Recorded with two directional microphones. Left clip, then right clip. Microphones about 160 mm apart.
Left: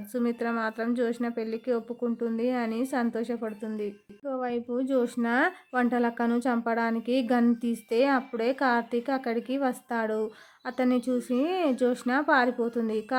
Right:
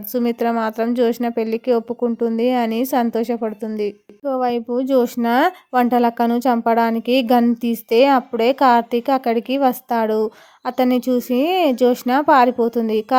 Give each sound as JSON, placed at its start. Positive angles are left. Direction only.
{"t": 0.1, "sound": "a woman's voice", "side_deg": -35}